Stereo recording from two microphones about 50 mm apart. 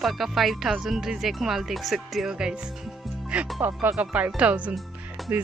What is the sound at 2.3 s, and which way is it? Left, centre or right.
Speech, centre.